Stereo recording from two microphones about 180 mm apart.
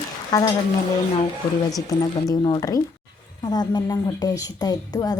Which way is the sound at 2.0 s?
20° left (ahead or behind).